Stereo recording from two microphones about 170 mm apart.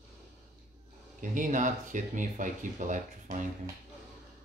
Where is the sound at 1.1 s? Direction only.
50° right (ahead or behind).